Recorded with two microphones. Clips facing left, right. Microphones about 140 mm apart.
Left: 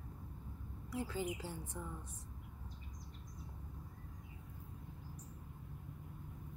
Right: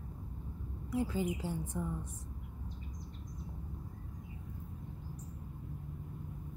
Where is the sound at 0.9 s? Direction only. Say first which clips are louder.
Right 6 dB; 15° right (ahead or behind).